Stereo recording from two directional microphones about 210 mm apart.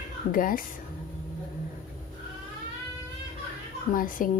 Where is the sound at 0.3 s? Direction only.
40° left (ahead or behind).